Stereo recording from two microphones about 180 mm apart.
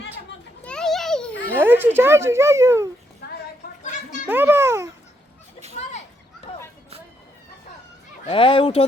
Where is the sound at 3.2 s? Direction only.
60° left (ahead or behind).